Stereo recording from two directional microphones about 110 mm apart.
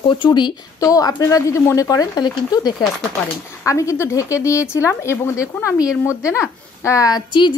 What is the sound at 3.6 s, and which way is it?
Speech, 30° left (ahead or behind).